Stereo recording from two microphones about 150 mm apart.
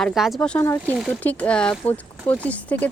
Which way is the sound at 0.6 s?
15° left (ahead or behind).